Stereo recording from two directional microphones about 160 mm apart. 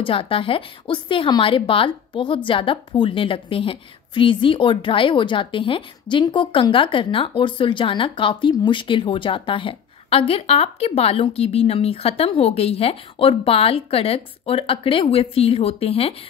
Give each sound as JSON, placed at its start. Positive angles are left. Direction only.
{"t": 0.0, "sound": "a woman's voice", "side_deg": 35}